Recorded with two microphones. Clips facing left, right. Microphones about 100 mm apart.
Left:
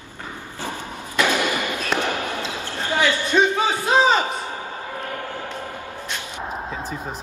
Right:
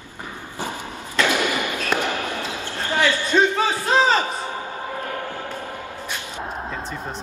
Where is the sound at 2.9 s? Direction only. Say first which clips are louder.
Even; 15° left (ahead or behind).